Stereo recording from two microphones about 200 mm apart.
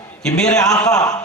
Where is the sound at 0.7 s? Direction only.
15° left (ahead or behind).